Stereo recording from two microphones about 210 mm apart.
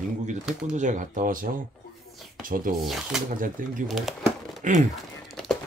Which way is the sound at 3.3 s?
40° right (ahead or behind).